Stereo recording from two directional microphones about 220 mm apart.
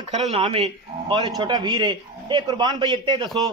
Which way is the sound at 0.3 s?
25° right (ahead or behind).